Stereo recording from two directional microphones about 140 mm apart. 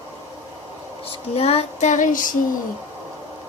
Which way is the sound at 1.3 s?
45° left (ahead or behind).